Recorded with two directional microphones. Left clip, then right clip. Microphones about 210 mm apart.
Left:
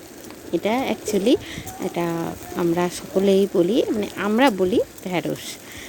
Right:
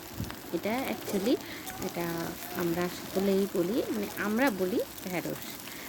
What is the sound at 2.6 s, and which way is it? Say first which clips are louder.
Speech: left 10 dB; 35° left (ahead or behind).